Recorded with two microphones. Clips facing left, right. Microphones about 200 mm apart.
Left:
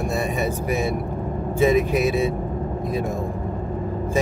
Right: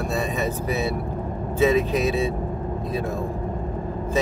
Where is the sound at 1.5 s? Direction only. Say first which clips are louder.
Left 1 dB; 10° left (ahead or behind).